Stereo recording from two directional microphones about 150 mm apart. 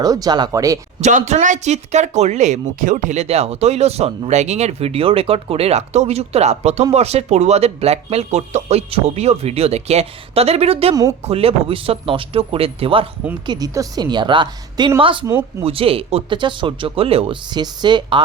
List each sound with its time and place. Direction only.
0.0 s speech: 25° right (ahead or behind)
1.0 s speech: 50° right (ahead or behind)
13.5 s speech: 25° right (ahead or behind)